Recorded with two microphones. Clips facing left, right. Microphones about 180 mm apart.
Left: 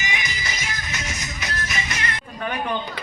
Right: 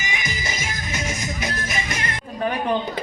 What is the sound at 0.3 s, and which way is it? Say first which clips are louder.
Music: right 3 dB; 50° right (ahead or behind).